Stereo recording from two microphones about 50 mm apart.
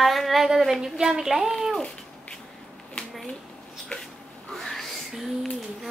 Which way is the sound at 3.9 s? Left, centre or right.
Centre.